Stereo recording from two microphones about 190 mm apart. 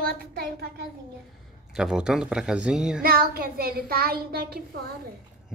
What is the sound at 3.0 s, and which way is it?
A woman's voice, 50° right (ahead or behind).